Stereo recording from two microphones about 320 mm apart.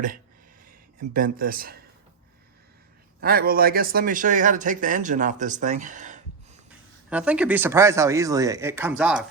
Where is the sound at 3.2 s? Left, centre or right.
Right.